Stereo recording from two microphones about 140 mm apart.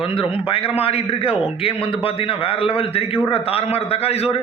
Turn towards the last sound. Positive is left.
turn(degrees=45)  # may be behind; listen again after turning